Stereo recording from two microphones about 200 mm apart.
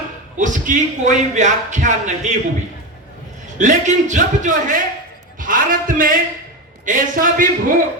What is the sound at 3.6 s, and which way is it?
A man's voice, 40° right (ahead or behind).